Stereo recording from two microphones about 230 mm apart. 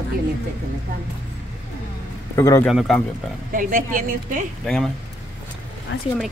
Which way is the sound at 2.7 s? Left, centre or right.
Centre.